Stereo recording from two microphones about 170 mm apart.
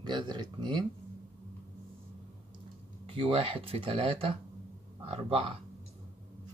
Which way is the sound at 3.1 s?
30° right (ahead or behind).